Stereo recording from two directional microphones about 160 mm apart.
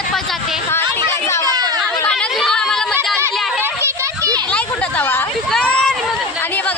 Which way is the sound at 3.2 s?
15° right (ahead or behind).